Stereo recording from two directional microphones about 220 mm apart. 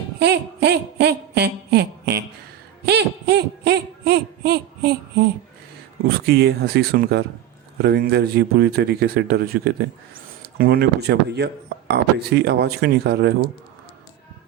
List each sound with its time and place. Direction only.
0.2 s speech: 50° right (ahead or behind)
2.8 s a sound: 50° right (ahead or behind)
6.1 s speech: 45° right (ahead or behind)